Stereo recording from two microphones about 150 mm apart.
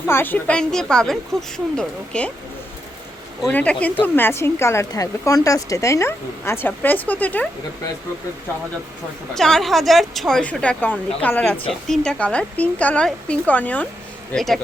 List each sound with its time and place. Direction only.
0.1 s a woman's voice: 15° left (ahead or behind)
3.5 s speech: 10° left (ahead or behind)
9.3 s a woman's voice: centre (ahead or behind)